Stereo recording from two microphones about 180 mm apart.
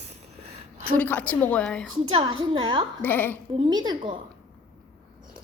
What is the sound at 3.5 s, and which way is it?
Speech, 25° right (ahead or behind).